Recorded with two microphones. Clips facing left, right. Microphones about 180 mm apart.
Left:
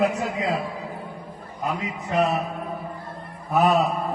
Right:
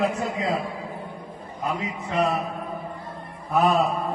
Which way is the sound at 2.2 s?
Centre (ahead or behind).